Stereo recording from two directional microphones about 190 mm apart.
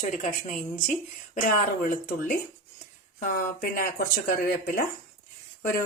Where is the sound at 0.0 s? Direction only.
40° left (ahead or behind).